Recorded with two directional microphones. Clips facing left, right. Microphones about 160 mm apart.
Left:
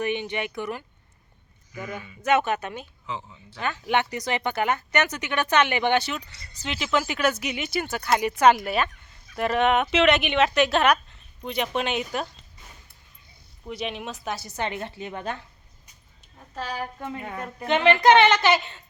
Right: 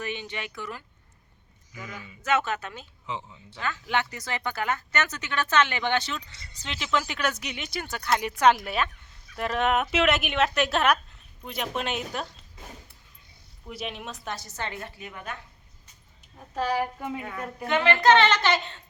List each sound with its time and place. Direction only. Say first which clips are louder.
0.0 s speech: left 7 dB; 15° left (ahead or behind)
3.1 s speech: even; 20° right (ahead or behind)
3.6 s speech: left 4 dB; 20° left (ahead or behind)
6.3 s speech: left 1 dB; 25° right (ahead or behind)
6.6 s speech: left 3 dB; 5° left (ahead or behind)
13.7 s speech: left 4 dB; centre (ahead or behind); by 15.4 s 30° left (ahead or behind)
16.6 s a woman's voice: right 5 dB; 10° right (ahead or behind)
17.7 s speech: left 3 dB; 20° left (ahead or behind)